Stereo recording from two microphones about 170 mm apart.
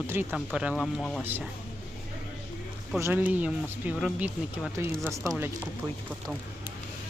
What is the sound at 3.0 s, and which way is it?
Speech, 10° right (ahead or behind).